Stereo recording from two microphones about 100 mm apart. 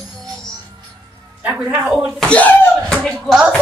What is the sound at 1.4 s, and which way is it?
Speech, 15° right (ahead or behind).